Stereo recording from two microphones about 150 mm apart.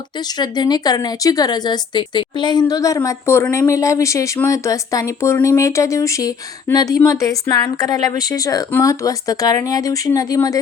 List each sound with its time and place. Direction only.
0.2 s speech: 30° left (ahead or behind)